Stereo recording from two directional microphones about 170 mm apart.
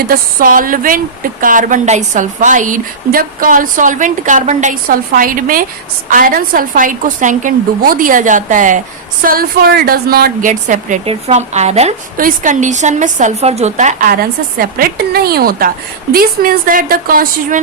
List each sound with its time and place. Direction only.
0.1 s a woman's voice: 55° right (ahead or behind)
9.2 s a woman's voice: 60° right (ahead or behind)
11.0 s a woman's voice: 35° right (ahead or behind)
12.1 s a woman's voice: 55° right (ahead or behind)